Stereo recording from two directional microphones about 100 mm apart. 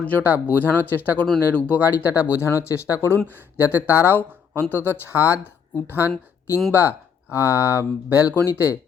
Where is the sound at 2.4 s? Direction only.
30° left (ahead or behind).